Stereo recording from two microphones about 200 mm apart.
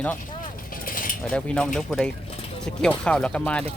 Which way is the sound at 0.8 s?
45° left (ahead or behind).